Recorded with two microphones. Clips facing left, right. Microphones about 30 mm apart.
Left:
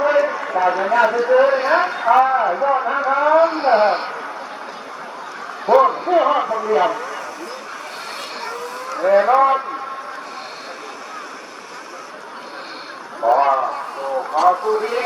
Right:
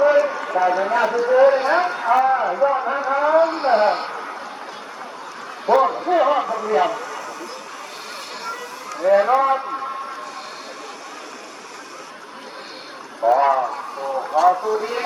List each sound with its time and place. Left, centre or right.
0.0 s clip-clop: centre
0.3 s clip-clop: left
0.6 s a man's voice: centre
5.6 s a man's voice: centre
8.9 s vehicle: left
9.1 s a man's voice: centre
13.2 s a man's voice: centre
13.7 s a sound: left
14.5 s speech: left